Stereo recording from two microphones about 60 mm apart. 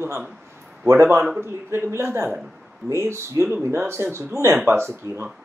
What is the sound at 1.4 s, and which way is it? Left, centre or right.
A man's voice, right.